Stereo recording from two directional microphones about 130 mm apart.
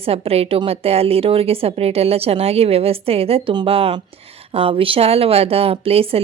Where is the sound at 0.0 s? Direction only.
50° right (ahead or behind).